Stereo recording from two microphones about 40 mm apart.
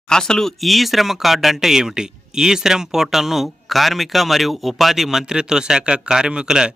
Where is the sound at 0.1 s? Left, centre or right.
Centre.